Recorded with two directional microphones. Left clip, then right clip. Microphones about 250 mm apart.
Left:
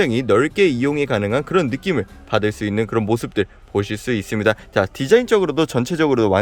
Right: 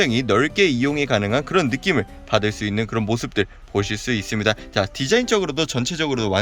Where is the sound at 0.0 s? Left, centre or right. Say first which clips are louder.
Left 2 dB; centre.